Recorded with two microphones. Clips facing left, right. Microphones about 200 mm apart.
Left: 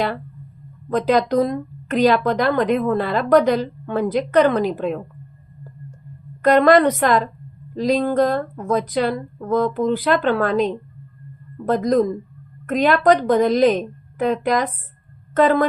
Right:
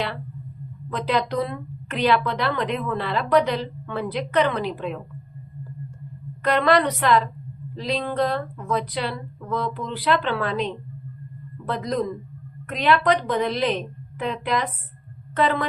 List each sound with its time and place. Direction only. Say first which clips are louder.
0.9 s a woman's voice: left 7 dB; 45° left (ahead or behind)
6.4 s a woman's voice: left 6 dB; 45° left (ahead or behind)